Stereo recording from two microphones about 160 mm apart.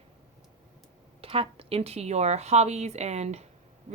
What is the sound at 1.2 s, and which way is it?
Speech, 35° right (ahead or behind).